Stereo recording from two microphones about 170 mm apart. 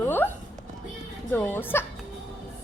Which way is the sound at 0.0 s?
10° left (ahead or behind).